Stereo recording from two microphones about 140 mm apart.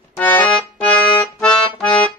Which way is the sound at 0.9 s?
30° left (ahead or behind).